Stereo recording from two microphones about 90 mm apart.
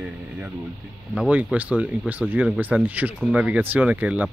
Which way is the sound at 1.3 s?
15° right (ahead or behind).